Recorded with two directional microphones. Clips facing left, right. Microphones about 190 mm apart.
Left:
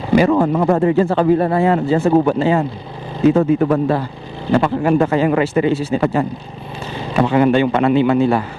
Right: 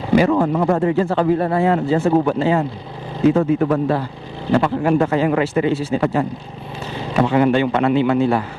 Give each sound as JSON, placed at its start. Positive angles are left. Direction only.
{"t": 0.2, "sound": "speech", "side_deg": 20}